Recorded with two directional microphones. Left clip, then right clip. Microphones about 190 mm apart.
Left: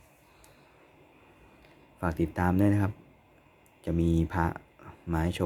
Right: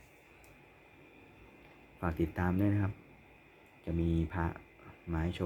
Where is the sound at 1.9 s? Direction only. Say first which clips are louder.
Left 5 dB; 25° left (ahead or behind).